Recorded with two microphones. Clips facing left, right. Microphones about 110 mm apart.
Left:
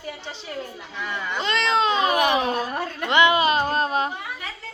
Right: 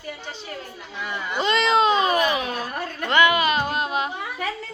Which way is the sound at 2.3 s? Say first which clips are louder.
Left 4 dB; 30° left (ahead or behind).